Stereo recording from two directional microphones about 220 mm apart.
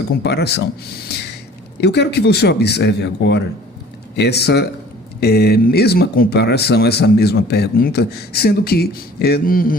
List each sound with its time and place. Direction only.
0.2 s speech: 50° left (ahead or behind)